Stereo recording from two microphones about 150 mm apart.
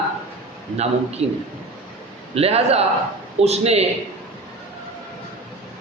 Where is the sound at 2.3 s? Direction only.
40° right (ahead or behind).